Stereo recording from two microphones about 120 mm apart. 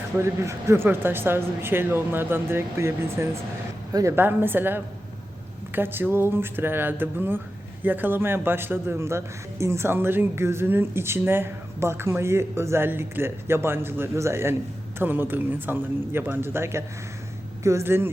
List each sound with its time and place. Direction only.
0.2 s a man's voice: 25° right (ahead or behind)